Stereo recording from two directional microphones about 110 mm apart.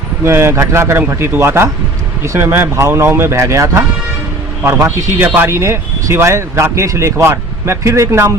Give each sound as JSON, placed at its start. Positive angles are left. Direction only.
{"t": 0.3, "sound": "a man's voice", "side_deg": -25}